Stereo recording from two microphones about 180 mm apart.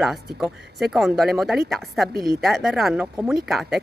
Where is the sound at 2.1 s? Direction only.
55° right (ahead or behind).